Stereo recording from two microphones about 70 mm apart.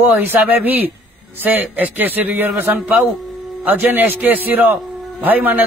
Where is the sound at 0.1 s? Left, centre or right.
Right.